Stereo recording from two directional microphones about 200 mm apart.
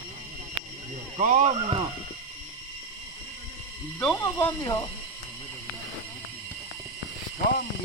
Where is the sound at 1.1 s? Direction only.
40° right (ahead or behind).